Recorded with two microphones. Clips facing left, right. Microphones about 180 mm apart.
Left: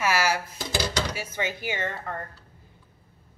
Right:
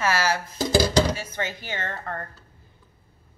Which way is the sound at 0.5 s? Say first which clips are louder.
Right 8 dB; 40° right (ahead or behind).